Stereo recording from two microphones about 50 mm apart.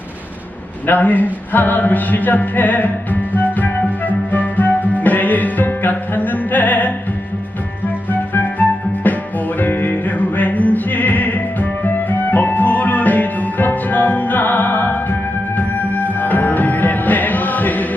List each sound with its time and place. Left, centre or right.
0.9 s music: left
8.3 s music: left